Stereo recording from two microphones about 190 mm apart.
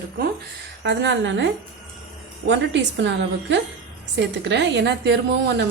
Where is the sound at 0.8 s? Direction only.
70° right (ahead or behind).